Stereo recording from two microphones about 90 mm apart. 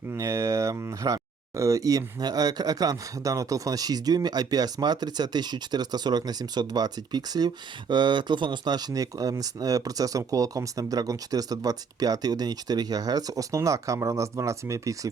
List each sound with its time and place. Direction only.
0.1 s speech: 35° right (ahead or behind)